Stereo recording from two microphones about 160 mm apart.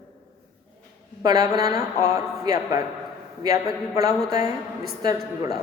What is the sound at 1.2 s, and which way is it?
A man's voice, 20° right (ahead or behind).